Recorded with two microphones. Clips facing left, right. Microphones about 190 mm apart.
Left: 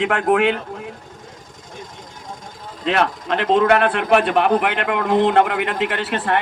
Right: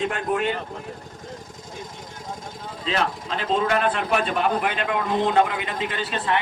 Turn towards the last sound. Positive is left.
turn(degrees=60)  # may be behind; listen again after turning